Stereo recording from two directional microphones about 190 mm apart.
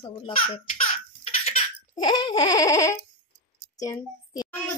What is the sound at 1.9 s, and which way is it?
Baby laughter, 20° left (ahead or behind).